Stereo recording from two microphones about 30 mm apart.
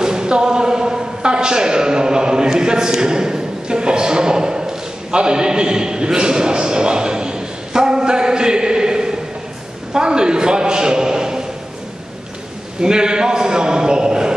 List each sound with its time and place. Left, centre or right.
0.0 s a sound: right
9.9 s a man's voice: right
12.8 s a man's voice: right